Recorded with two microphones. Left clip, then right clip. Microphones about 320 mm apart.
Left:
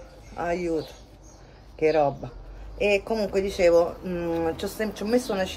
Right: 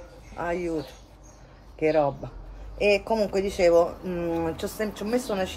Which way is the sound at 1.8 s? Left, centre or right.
Centre.